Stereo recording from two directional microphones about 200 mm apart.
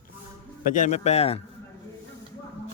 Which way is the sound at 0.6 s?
40° left (ahead or behind).